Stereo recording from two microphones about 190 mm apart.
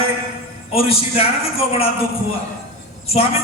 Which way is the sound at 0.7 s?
30° left (ahead or behind).